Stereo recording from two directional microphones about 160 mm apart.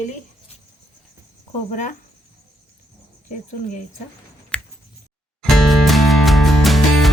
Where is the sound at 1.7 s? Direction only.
50° left (ahead or behind).